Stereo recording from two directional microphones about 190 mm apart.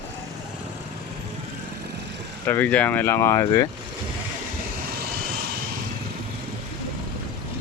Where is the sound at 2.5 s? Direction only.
10° left (ahead or behind).